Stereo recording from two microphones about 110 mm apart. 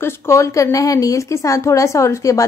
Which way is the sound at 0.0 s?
25° left (ahead or behind).